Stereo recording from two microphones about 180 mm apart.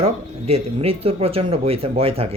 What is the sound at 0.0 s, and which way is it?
Speech, 35° right (ahead or behind).